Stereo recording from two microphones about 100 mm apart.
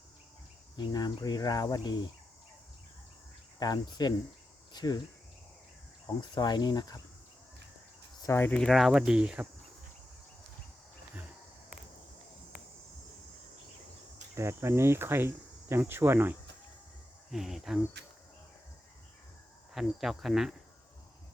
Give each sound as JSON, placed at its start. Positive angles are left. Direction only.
{"t": 0.8, "sound": "speech", "side_deg": 40}
{"t": 3.6, "sound": "speech", "side_deg": 45}
{"t": 6.1, "sound": "speech", "side_deg": 45}
{"t": 8.3, "sound": "speech", "side_deg": 25}
{"t": 8.5, "sound": "speech", "side_deg": 5}
{"t": 14.3, "sound": "cricket", "side_deg": -25}
{"t": 17.3, "sound": "speech", "side_deg": -5}
{"t": 19.7, "sound": "speech", "side_deg": -5}